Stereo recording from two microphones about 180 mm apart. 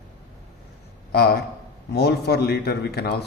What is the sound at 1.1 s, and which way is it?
A man's voice, 60° left (ahead or behind).